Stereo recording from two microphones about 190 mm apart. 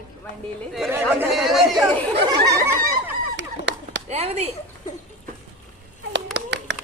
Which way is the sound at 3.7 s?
70° right (ahead or behind).